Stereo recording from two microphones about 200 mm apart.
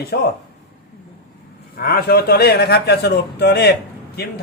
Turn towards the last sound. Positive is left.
turn(degrees=55)  # may be behind; listen again after turning